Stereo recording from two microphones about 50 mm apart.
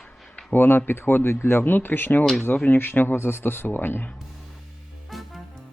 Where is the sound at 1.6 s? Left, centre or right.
Left.